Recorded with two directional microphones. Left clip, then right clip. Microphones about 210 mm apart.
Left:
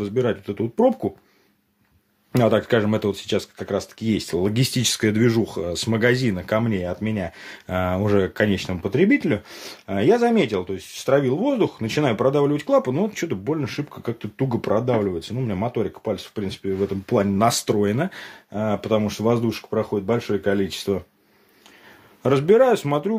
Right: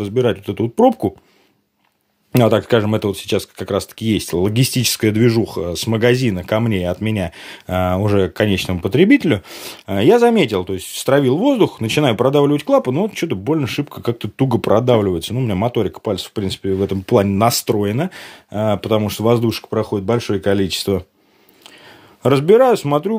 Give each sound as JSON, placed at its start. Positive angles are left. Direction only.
{"t": 0.0, "sound": "speech", "side_deg": -30}
{"t": 2.3, "sound": "speech", "side_deg": -30}
{"t": 18.5, "sound": "speech", "side_deg": -40}
{"t": 22.2, "sound": "speech", "side_deg": -30}